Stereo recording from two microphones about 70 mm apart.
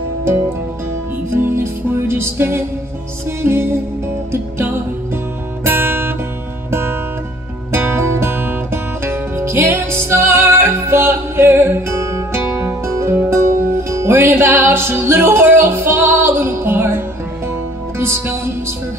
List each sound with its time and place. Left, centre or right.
0.2 s music: right
5.6 s guitar: right
6.7 s music: right